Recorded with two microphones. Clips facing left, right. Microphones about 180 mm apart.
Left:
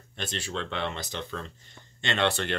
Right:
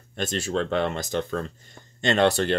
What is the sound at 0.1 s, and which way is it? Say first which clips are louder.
Speech: right 8 dB; 45° right (ahead or behind).